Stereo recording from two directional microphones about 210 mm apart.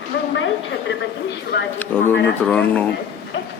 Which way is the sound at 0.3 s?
65° left (ahead or behind).